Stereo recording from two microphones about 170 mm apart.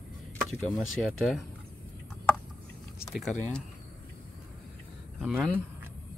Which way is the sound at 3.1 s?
Centre (ahead or behind).